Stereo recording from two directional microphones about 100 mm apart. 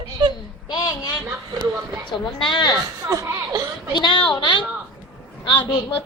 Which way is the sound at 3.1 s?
35° right (ahead or behind).